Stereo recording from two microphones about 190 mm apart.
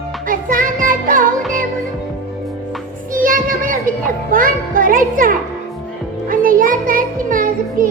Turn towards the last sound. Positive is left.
turn(degrees=-45)  # may be behind; listen again after turning